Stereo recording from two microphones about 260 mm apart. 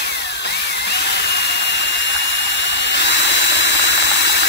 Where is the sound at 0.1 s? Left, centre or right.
Left.